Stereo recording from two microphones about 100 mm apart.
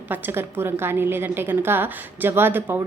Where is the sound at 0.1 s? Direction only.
20° right (ahead or behind).